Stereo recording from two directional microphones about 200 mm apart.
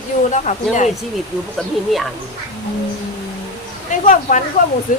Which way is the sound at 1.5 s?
Centre (ahead or behind).